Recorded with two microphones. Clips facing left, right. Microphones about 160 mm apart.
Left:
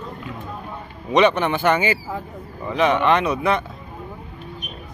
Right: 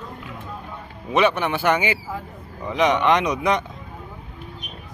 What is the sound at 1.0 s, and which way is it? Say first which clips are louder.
Speech: left 3 dB; 5° right (ahead or behind).